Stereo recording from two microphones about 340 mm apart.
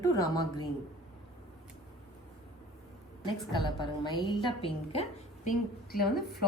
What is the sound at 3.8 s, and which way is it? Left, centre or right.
A woman's voice, centre.